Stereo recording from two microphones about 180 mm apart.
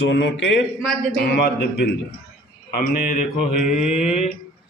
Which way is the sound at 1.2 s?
60° left (ahead or behind).